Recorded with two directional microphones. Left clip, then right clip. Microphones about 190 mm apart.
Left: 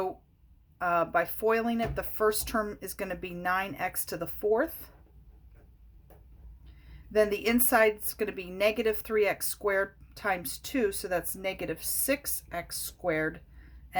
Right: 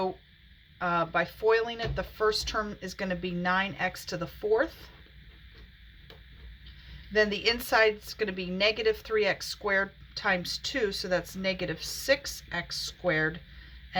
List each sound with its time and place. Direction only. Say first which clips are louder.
0.8 s speech: left 1 dB; 40° left (ahead or behind)
7.1 s speech: even; 40° left (ahead or behind)